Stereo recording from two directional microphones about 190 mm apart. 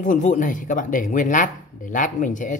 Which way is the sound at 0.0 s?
40° left (ahead or behind).